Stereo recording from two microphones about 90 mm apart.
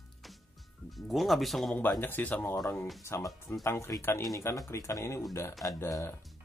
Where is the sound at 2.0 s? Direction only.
20° left (ahead or behind).